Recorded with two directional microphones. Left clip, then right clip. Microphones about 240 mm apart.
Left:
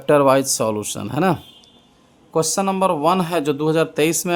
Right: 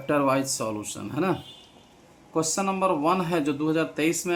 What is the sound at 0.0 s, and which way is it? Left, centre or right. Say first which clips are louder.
Speech: left 9 dB; left.